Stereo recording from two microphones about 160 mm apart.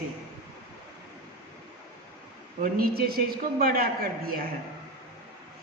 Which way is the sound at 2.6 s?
70° right (ahead or behind).